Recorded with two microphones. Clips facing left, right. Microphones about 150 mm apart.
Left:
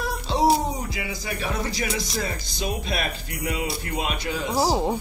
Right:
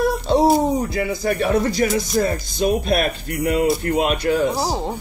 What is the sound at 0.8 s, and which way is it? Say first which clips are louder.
Speech: right 10 dB; 50° right (ahead or behind).